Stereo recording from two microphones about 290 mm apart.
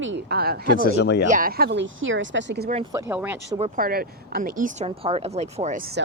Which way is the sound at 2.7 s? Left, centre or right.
Centre.